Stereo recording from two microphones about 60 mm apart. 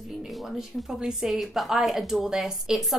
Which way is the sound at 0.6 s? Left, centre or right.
Centre.